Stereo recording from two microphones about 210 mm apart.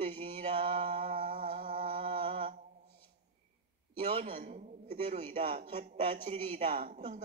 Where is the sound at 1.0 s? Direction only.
40° right (ahead or behind).